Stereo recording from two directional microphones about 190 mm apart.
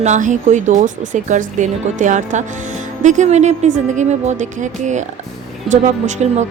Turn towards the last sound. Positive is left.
turn(degrees=-40)  # may be behind; listen again after turning